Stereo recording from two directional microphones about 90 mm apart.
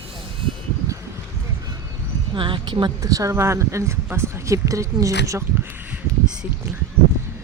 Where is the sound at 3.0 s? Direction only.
40° right (ahead or behind).